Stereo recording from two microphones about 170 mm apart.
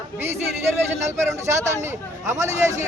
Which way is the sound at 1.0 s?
15° right (ahead or behind).